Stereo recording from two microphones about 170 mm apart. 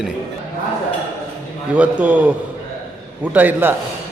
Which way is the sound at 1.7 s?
10° right (ahead or behind).